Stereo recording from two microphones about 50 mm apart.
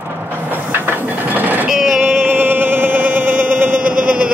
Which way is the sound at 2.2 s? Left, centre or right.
Right.